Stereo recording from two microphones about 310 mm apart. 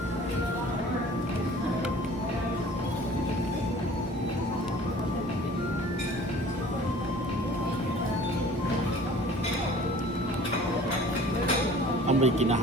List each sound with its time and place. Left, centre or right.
12.0 s speech: right